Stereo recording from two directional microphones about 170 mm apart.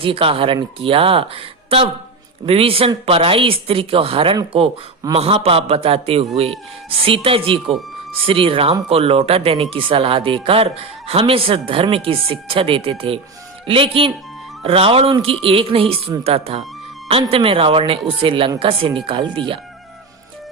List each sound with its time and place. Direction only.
0.0 s speech: 30° right (ahead or behind)